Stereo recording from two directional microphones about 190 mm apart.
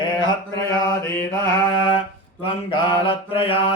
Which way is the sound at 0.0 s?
25° left (ahead or behind).